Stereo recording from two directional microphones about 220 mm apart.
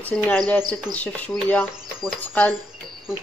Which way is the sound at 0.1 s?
10° left (ahead or behind).